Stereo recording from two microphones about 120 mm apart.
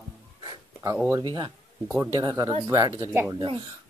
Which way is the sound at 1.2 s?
40° right (ahead or behind).